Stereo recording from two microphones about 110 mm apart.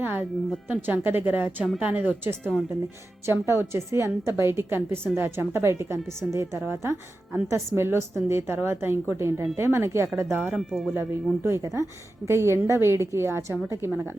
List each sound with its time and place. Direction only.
0.0 s a woman's voice: 15° right (ahead or behind)
10.4 s speech: centre (ahead or behind)
11.4 s a woman's voice: 25° right (ahead or behind)